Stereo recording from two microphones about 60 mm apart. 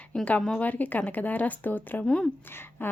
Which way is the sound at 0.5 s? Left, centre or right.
Left.